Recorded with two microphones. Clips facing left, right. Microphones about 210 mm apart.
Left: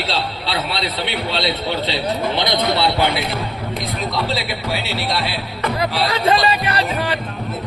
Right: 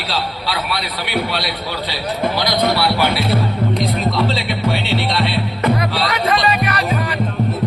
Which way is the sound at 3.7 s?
Centre (ahead or behind).